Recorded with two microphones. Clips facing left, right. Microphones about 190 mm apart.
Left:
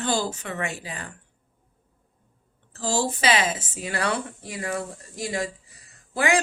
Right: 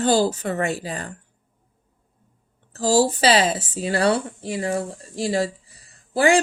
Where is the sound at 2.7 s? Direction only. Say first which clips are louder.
Right 8 dB; 35° right (ahead or behind).